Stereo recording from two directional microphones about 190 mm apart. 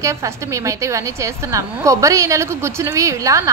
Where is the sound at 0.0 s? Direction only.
15° right (ahead or behind).